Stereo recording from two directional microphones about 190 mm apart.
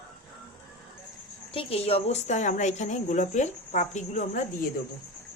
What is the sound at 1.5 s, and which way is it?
A woman's voice, 30° left (ahead or behind).